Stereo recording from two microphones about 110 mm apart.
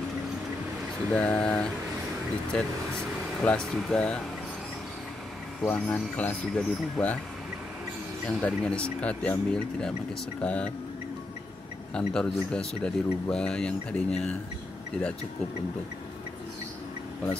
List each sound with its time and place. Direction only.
1.1 s speech: 5° left (ahead or behind)
5.7 s speech: 15° left (ahead or behind)
8.4 s speech: 10° left (ahead or behind)
11.9 s speech: 5° left (ahead or behind)